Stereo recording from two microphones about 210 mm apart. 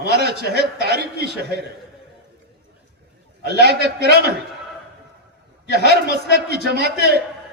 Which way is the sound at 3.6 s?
50° right (ahead or behind).